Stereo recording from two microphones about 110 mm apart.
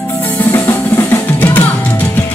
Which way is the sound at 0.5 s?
20° left (ahead or behind).